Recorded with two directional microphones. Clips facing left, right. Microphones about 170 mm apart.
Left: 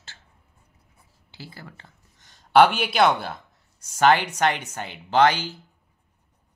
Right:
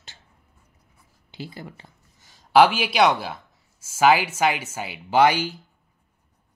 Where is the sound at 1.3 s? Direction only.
20° right (ahead or behind).